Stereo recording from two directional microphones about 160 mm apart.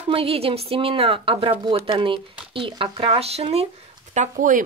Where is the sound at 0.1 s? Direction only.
35° right (ahead or behind).